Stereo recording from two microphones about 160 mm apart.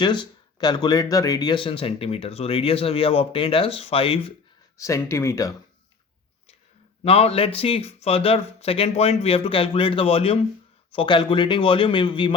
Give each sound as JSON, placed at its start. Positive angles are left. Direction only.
{"t": 0.0, "sound": "speech", "side_deg": 30}
{"t": 4.8, "sound": "speech", "side_deg": 15}
{"t": 7.0, "sound": "speech", "side_deg": 40}